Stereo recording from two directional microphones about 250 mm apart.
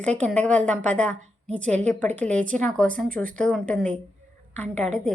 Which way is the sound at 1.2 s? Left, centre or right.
Right.